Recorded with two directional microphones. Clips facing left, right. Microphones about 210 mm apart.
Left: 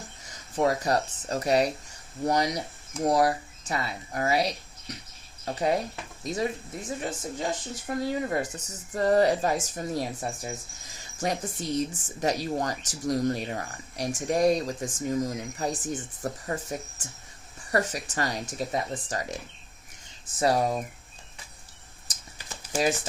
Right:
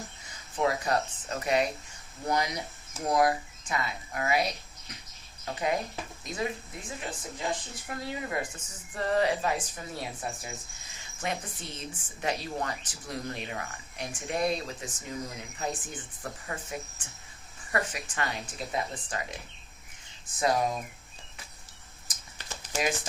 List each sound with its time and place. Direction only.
0.5 s speech: 40° left (ahead or behind)
20.4 s speech: 35° left (ahead or behind)
22.7 s speech: 35° left (ahead or behind)